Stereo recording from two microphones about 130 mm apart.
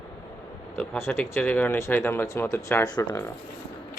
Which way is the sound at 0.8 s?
15° left (ahead or behind).